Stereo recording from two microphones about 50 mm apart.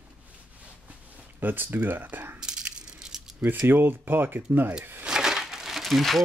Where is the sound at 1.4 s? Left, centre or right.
Right.